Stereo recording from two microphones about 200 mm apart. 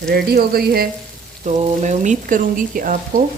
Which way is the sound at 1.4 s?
35° right (ahead or behind).